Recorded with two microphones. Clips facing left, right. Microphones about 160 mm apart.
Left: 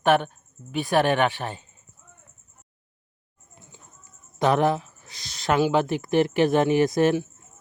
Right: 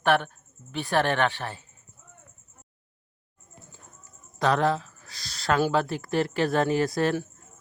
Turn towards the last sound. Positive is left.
turn(degrees=20)  # may be behind; listen again after turning